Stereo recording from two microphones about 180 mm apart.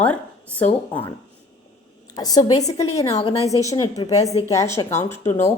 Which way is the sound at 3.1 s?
35° left (ahead or behind).